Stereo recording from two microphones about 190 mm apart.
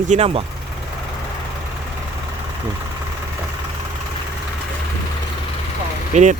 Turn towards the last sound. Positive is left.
turn(degrees=-40)  # may be behind; listen again after turning